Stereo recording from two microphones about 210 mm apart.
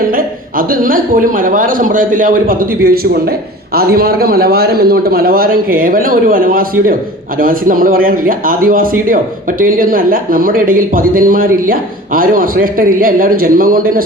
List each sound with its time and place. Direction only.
0.1 s a man's voice: 45° right (ahead or behind)